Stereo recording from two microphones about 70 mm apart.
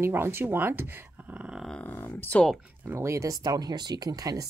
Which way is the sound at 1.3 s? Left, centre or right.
Centre.